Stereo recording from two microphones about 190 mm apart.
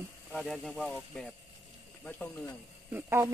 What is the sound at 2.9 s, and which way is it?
Speech, 15° right (ahead or behind).